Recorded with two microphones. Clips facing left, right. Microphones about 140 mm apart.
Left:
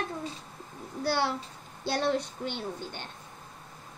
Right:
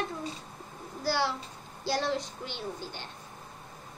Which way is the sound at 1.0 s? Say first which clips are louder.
Left 1 dB; 55° left (ahead or behind).